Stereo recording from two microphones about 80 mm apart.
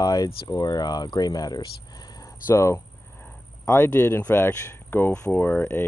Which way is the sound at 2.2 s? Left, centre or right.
Left.